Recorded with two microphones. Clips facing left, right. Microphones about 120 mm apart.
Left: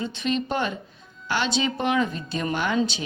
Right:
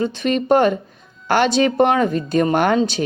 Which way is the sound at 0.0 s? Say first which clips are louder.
Right 7 dB; 50° right (ahead or behind).